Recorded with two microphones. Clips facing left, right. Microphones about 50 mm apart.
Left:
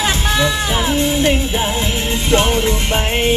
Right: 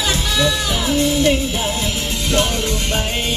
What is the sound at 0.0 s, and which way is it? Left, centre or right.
Music, left.